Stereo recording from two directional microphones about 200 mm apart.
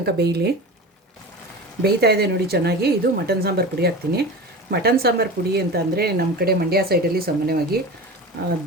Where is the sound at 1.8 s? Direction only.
55° right (ahead or behind).